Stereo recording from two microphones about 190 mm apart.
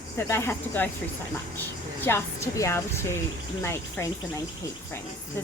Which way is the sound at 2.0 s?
15° left (ahead or behind).